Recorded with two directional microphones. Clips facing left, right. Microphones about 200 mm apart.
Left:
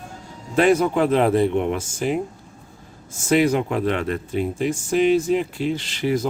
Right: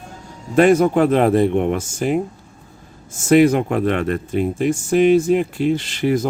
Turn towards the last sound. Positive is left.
turn(degrees=-50)  # may be behind; listen again after turning